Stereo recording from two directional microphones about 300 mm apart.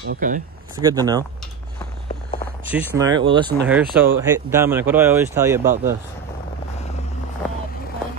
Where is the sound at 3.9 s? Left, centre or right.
Centre.